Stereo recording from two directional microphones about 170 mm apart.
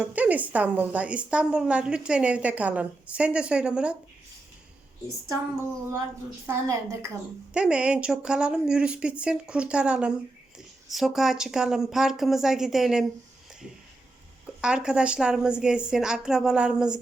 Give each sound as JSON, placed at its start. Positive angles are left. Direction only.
{"t": 0.0, "sound": "a woman's voice", "side_deg": -10}
{"t": 6.4, "sound": "a woman's voice", "side_deg": -15}
{"t": 14.6, "sound": "speech", "side_deg": -5}